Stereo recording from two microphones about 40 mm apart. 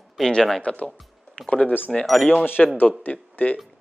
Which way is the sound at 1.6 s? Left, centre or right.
Left.